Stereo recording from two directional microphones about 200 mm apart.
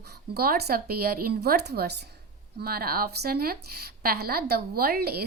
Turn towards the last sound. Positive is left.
turn(degrees=-50)  # may be behind; listen again after turning